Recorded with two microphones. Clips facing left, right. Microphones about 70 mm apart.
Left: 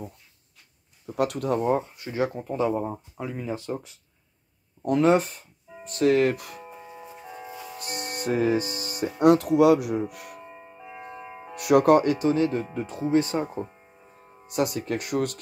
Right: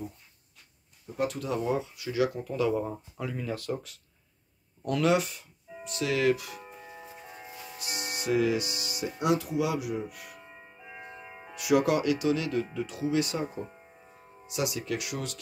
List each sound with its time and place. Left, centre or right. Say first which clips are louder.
1.1 s speech: left 5 dB; left
7.8 s speech: left 3 dB; left
11.5 s speech: left 7 dB; left